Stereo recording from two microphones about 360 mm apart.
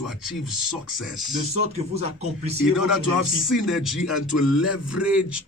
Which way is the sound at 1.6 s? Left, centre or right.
Centre.